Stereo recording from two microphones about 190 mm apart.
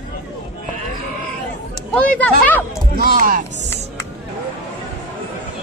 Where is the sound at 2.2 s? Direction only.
10° left (ahead or behind).